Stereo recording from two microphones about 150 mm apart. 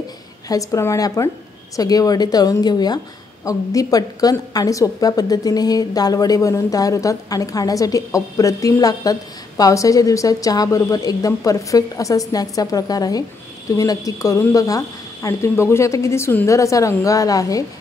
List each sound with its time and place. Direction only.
0.5 s a woman's voice: 20° left (ahead or behind)